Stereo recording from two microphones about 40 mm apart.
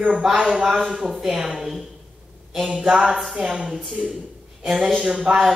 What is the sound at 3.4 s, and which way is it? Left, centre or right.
Speech, centre.